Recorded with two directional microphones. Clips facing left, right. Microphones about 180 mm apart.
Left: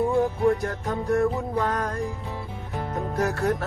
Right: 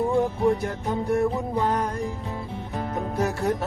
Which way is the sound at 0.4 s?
15° right (ahead or behind).